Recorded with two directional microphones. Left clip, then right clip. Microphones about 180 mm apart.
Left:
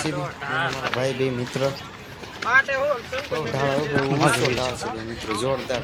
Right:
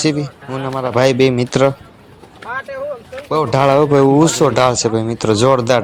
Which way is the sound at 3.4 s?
45° right (ahead or behind).